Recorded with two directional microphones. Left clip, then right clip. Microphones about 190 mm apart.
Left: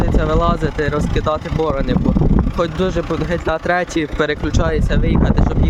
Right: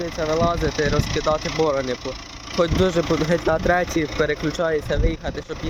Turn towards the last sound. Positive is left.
turn(degrees=25)  # may be behind; listen again after turning